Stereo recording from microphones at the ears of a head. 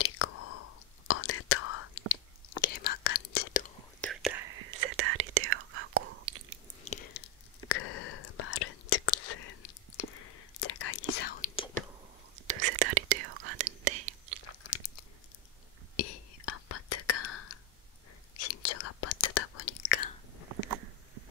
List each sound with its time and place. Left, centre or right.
0.0 s whispering: left
4.1 s whispering: right
6.8 s whispering: left
12.4 s whispering: right
14.6 s chewing: left
16.0 s whispering: left
20.4 s a sound: right